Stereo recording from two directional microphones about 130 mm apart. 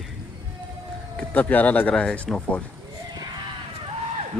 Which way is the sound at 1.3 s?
15° left (ahead or behind).